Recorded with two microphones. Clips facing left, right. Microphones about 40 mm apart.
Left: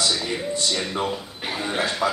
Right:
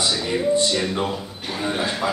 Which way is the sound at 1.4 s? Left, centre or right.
Centre.